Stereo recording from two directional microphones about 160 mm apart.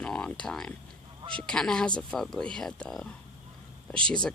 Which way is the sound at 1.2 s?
30° right (ahead or behind).